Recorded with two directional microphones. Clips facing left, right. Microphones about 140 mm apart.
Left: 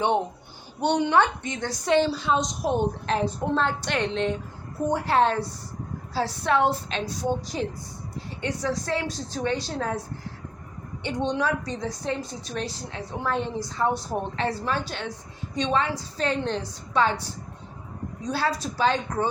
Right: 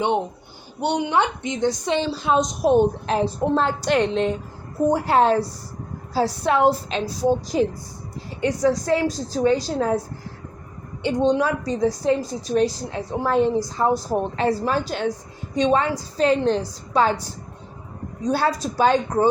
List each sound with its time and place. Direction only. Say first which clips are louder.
0.8 s a woman's voice: even; 15° right (ahead or behind)
2.2 s a woman's voice: right 4 dB; 55° right (ahead or behind)
3.1 s a woman's voice: right 4 dB; 40° right (ahead or behind)
8.4 s a woman's voice: right 8 dB; 40° right (ahead or behind)
11.0 s a woman's voice: right 7 dB; 35° right (ahead or behind)
18.3 s a woman's voice: right 5 dB; 50° right (ahead or behind)